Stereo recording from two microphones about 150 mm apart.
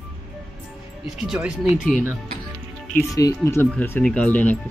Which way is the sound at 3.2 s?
20° left (ahead or behind).